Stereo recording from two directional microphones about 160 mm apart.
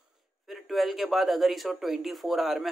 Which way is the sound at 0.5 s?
Centre (ahead or behind).